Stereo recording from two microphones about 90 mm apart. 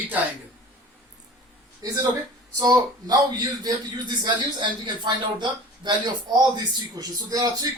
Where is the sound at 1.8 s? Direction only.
45° right (ahead or behind).